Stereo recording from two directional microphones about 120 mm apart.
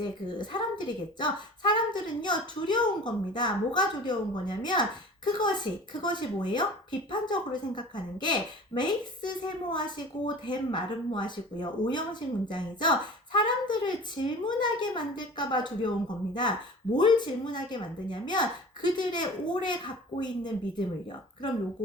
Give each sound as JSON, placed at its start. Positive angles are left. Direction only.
{"t": 0.0, "sound": "a woman's voice", "side_deg": 40}